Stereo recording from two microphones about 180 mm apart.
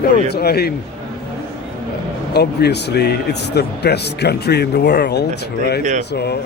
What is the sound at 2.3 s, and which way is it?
Speech, 65° left (ahead or behind).